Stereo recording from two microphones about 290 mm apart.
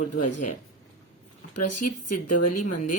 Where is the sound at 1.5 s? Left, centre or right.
Left.